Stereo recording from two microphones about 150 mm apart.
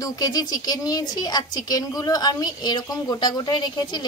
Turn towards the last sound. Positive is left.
turn(degrees=30)  # may be behind; listen again after turning